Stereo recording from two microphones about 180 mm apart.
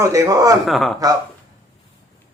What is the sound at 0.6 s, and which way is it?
Speech, centre (ahead or behind).